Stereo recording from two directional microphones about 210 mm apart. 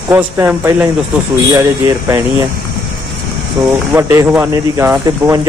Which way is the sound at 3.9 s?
10° right (ahead or behind).